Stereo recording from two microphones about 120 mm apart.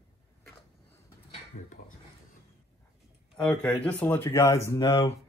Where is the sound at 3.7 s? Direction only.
15° left (ahead or behind).